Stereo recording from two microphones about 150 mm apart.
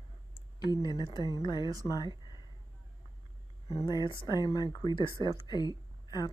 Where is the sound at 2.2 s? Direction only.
30° left (ahead or behind).